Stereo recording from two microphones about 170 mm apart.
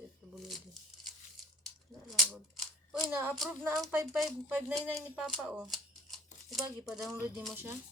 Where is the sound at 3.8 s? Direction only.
Centre (ahead or behind).